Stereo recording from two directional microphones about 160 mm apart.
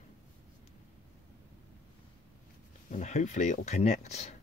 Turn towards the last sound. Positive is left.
turn(degrees=45)  # may be behind; listen again after turning